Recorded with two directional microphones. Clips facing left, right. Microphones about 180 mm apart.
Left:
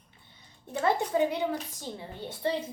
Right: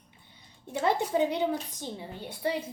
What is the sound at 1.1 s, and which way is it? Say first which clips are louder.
A woman's voice: right 1 dB; 15° right (ahead or behind).